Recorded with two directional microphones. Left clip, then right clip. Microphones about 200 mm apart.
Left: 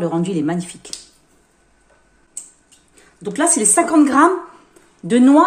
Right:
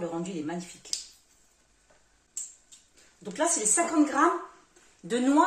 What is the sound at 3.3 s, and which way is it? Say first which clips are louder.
Speech: left 10 dB; 60° left (ahead or behind).